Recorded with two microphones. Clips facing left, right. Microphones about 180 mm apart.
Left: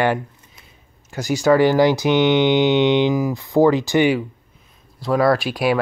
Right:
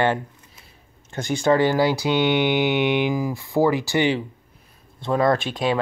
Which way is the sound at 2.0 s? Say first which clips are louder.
Left 4 dB; 20° left (ahead or behind).